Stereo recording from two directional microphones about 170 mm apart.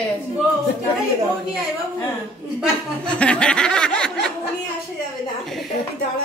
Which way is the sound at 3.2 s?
5° left (ahead or behind).